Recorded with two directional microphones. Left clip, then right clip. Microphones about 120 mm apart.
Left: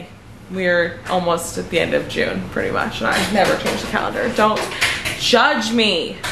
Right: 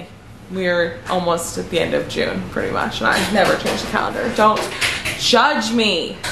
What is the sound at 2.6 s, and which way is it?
A woman's voice, 10° right (ahead or behind).